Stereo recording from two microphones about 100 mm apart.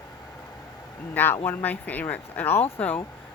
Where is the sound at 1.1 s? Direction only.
20° left (ahead or behind).